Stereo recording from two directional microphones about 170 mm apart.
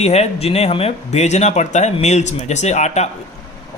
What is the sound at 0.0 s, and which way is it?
Speech, 40° left (ahead or behind).